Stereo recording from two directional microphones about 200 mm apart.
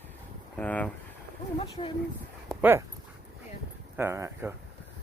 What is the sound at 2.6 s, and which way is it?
Speech, 10° right (ahead or behind).